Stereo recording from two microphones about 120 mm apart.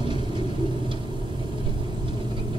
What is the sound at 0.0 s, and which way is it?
Vehicle, 40° right (ahead or behind).